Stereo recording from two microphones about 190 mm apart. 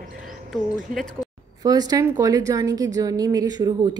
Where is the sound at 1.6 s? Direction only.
20° right (ahead or behind).